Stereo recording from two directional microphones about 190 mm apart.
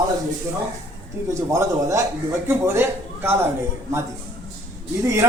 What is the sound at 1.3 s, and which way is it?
A man's voice, 15° right (ahead or behind).